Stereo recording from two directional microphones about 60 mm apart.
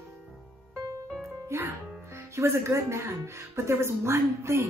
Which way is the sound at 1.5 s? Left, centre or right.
Right.